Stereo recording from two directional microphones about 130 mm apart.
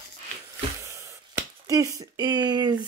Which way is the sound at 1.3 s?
25° right (ahead or behind).